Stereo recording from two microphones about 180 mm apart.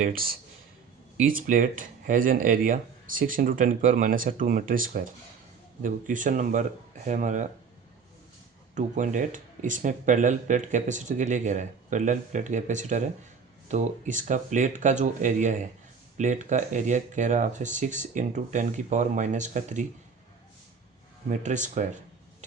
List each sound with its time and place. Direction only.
0.0 s speech: 55° right (ahead or behind)
8.7 s speech: 45° right (ahead or behind)
21.2 s speech: 40° right (ahead or behind)